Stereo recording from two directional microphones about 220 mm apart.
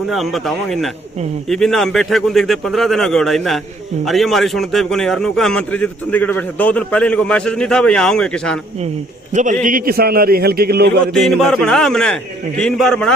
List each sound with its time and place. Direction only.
0.1 s a man's voice: centre (ahead or behind)
9.3 s a man's voice: 35° right (ahead or behind)
11.1 s a man's voice: centre (ahead or behind)